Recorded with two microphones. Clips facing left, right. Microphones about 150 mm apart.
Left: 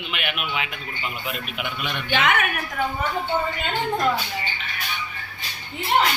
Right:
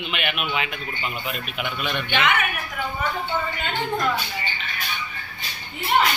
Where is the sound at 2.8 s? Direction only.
40° left (ahead or behind).